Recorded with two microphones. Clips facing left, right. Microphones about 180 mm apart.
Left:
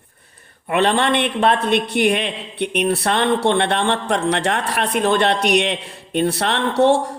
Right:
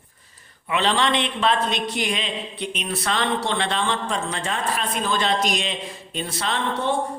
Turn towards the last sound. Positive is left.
turn(degrees=75)  # may be behind; listen again after turning